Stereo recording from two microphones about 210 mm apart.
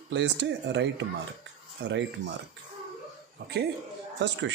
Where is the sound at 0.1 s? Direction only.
55° right (ahead or behind).